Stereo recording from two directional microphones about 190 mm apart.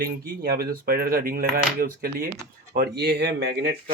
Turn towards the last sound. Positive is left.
turn(degrees=-60)  # may be behind; listen again after turning